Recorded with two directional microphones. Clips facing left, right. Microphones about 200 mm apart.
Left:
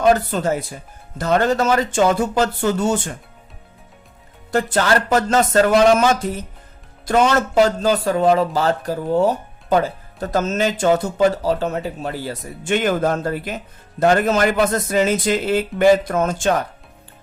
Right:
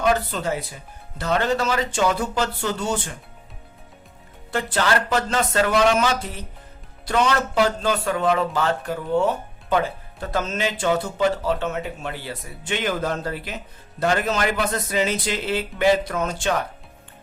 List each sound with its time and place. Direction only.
0.0 s speech: 40° left (ahead or behind)
4.5 s speech: 45° left (ahead or behind)